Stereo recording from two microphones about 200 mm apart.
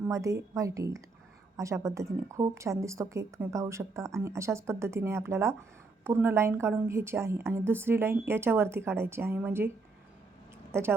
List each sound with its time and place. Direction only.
0.1 s a woman's voice: 15° right (ahead or behind)